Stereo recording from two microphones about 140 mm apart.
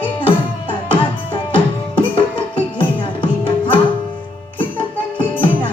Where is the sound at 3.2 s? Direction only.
35° left (ahead or behind).